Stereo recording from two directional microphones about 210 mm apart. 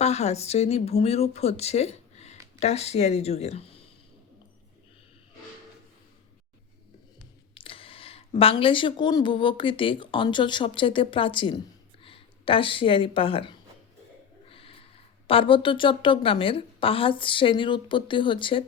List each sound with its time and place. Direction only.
0.0 s speech: 30° left (ahead or behind)
7.5 s a woman's voice: 25° left (ahead or behind)
14.5 s snort: 25° left (ahead or behind)
15.3 s a woman's voice: 25° left (ahead or behind)